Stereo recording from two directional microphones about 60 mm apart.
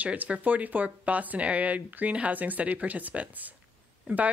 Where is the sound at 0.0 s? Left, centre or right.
Right.